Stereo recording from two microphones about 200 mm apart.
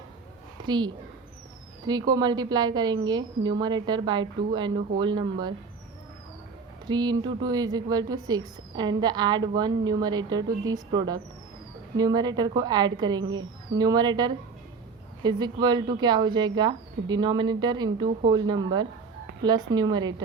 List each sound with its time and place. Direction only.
0.6 s a woman's voice: 20° right (ahead or behind)
1.9 s a woman's voice: 20° right (ahead or behind)
6.8 s a woman's voice: 20° right (ahead or behind)